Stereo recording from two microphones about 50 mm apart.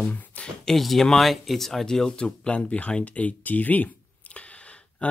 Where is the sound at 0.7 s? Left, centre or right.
Centre; by 5.0 s left.